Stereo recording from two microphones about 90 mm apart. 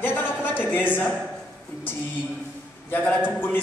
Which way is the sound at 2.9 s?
15° left (ahead or behind).